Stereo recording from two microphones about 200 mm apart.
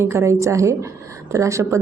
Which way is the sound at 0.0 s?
15° right (ahead or behind).